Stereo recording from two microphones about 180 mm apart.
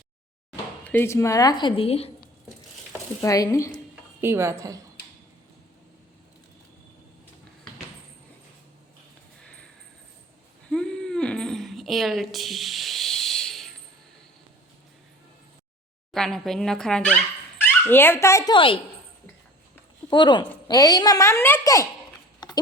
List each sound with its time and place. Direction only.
0.9 s a child's voice: 15° left (ahead or behind); by 2.0 s 35° left (ahead or behind)
3.2 s speech: 20° left (ahead or behind)
4.2 s a woman's voice: 15° right (ahead or behind)
9.4 s a sound: 5° left (ahead or behind)
10.7 s a sound: 5° left (ahead or behind)
16.1 s speech: 5° left (ahead or behind); by 18.8 s 25° left (ahead or behind)
20.1 s a child's voice: 25° left (ahead or behind)